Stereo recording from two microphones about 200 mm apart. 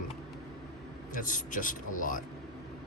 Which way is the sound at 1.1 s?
40° left (ahead or behind).